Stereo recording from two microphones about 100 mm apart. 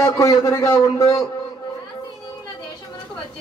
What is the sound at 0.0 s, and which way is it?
A man's voice, 35° left (ahead or behind).